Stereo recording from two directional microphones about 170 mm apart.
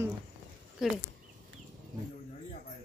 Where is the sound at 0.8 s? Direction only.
Centre (ahead or behind).